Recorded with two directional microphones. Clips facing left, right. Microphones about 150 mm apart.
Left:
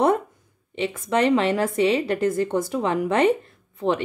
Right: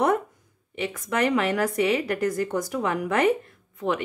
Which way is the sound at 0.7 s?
25° left (ahead or behind).